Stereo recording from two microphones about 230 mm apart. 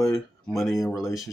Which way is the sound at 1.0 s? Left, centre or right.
Centre.